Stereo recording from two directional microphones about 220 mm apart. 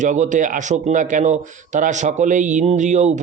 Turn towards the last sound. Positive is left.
turn(degrees=-35)  # may be behind; listen again after turning